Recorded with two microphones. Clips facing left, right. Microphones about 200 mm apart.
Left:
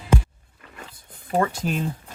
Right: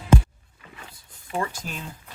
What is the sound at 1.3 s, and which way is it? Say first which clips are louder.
Speech: left 6 dB; 40° left (ahead or behind).